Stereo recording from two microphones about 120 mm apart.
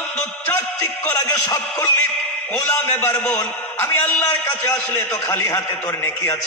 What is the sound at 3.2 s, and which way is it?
A man's voice, 15° left (ahead or behind).